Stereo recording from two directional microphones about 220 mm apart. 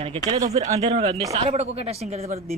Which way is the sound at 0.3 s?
15° right (ahead or behind).